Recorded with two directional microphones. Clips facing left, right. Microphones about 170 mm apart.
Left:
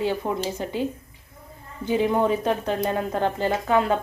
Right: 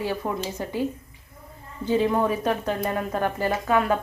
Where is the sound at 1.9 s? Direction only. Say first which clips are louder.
Left 1 dB; 20° left (ahead or behind).